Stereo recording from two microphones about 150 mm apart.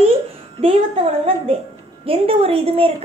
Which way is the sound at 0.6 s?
40° right (ahead or behind).